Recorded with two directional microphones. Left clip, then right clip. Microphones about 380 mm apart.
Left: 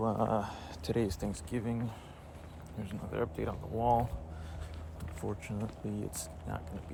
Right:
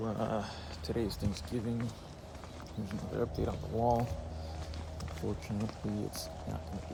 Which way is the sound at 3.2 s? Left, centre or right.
Centre.